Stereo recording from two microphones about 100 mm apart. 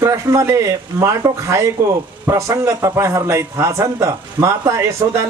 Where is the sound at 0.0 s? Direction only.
30° right (ahead or behind).